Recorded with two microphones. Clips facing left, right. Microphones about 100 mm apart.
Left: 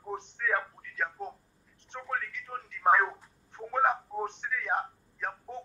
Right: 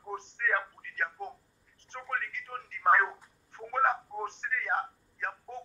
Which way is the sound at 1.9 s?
5° left (ahead or behind).